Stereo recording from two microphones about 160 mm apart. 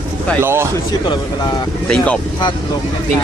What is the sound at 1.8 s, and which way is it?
Speech, 5° left (ahead or behind).